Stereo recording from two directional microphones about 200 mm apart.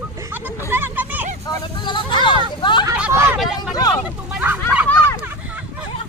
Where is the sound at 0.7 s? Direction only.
10° right (ahead or behind).